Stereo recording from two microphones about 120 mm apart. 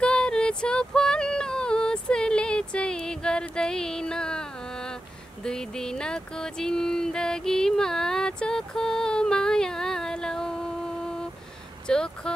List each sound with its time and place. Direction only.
0.0 s female singing: 5° left (ahead or behind)
5.4 s music: 5° left (ahead or behind)
11.9 s a sound: 5° left (ahead or behind)